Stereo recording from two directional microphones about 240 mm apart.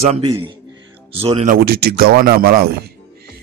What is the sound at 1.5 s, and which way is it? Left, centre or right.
Speech, right.